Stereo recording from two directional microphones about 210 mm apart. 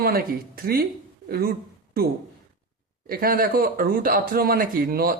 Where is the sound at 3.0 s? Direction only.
45° right (ahead or behind).